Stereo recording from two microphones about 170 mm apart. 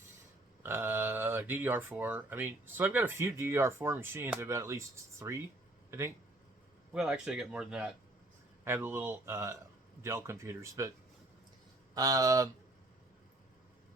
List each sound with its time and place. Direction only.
0.6 s speech: 15° right (ahead or behind)
6.9 s speech: 5° right (ahead or behind)
11.9 s speech: 20° right (ahead or behind)